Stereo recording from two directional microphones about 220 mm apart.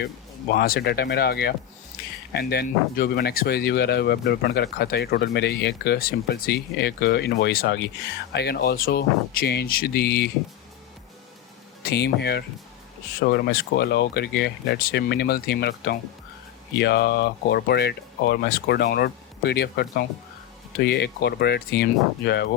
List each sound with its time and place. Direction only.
0.5 s speech: 45° left (ahead or behind)
11.9 s speech: 50° left (ahead or behind)